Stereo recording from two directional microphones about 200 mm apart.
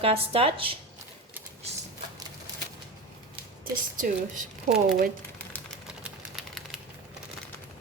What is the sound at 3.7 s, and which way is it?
A woman's voice, 40° right (ahead or behind).